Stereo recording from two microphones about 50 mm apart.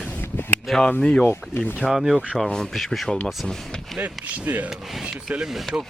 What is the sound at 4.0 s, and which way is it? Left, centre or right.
Speech, right.